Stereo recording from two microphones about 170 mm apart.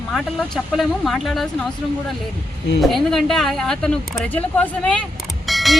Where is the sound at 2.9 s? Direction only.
Centre (ahead or behind).